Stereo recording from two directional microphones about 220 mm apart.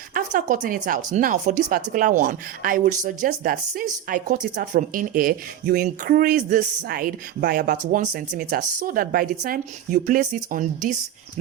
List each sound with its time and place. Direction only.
0.1 s speech: 40° right (ahead or behind)